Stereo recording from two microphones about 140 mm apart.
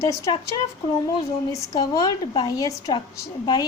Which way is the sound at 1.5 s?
25° left (ahead or behind).